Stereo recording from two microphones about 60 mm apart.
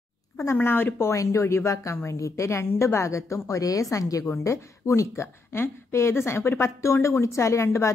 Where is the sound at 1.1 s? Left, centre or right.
Left.